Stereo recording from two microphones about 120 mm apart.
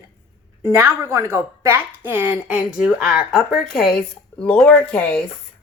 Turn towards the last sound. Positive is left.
turn(degrees=10)  # may be behind; listen again after turning